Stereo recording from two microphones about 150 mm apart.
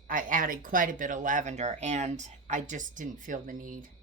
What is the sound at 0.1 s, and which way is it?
Speech, 60° right (ahead or behind).